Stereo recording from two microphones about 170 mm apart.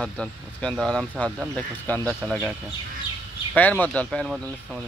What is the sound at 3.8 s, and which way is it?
Speech, 5° left (ahead or behind).